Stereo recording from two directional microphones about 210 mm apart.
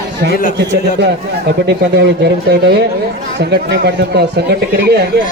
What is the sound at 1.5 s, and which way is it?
Speech, 50° right (ahead or behind).